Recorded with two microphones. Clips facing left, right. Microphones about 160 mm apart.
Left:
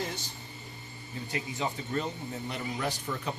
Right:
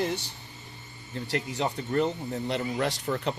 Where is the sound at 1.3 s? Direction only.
75° right (ahead or behind).